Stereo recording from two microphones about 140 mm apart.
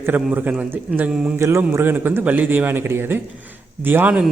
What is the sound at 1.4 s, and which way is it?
A man's voice, 20° right (ahead or behind).